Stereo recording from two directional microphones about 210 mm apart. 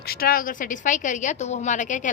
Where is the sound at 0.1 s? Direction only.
45° left (ahead or behind).